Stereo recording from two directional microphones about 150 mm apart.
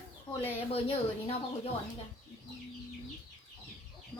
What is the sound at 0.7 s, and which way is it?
Speech, 40° left (ahead or behind).